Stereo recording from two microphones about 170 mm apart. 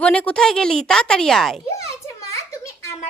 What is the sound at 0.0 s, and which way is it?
A woman's voice, 5° left (ahead or behind).